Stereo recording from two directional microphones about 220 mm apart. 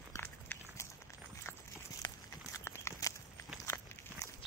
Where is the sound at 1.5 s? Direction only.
10° left (ahead or behind).